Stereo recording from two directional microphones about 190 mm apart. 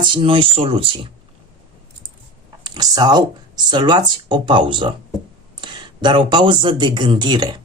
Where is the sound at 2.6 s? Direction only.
20° right (ahead or behind).